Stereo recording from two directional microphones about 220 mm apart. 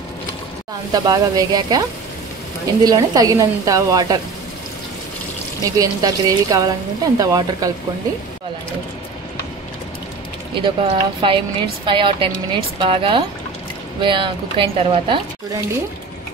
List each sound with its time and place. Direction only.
0.9 s a woman's voice: 15° right (ahead or behind)
5.8 s a woman's voice: 15° right (ahead or behind)
10.6 s speech: 25° right (ahead or behind)